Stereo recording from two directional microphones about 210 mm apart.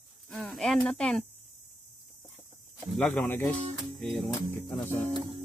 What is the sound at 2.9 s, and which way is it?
Speech, 5° left (ahead or behind).